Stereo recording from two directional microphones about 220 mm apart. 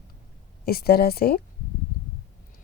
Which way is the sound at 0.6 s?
45° left (ahead or behind).